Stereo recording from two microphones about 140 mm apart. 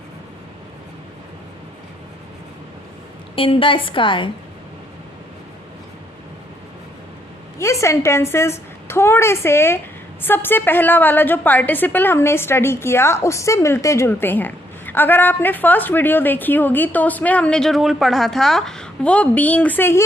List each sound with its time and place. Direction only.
3.3 s a woman's voice: 40° left (ahead or behind)
7.6 s a woman's voice: 20° left (ahead or behind)